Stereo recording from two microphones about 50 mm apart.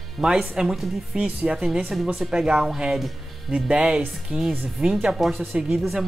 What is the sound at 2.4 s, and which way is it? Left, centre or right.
Speech, centre.